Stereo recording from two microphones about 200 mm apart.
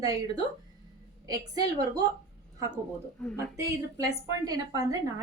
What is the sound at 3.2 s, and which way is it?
Speech, 5° left (ahead or behind).